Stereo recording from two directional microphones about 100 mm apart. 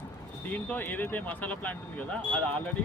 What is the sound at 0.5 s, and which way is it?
Speech, 15° left (ahead or behind).